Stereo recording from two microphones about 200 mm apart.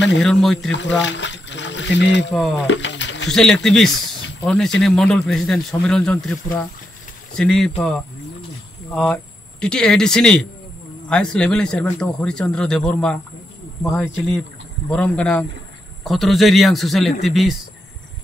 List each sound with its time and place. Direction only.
0.2 s speech: centre (ahead or behind)
0.7 s speech: 65° left (ahead or behind)
1.0 s a sound: 65° left (ahead or behind)
2.3 s speech: centre (ahead or behind)
2.6 s a sound: 65° left (ahead or behind)
3.3 s speech: centre (ahead or behind)